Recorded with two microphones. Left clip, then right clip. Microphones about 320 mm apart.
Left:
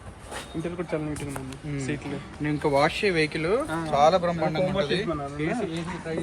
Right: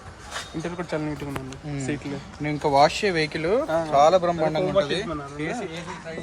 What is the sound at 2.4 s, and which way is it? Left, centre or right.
Speech, right.